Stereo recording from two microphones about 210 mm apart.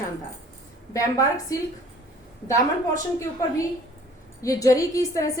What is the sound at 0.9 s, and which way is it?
A woman's voice, 15° left (ahead or behind).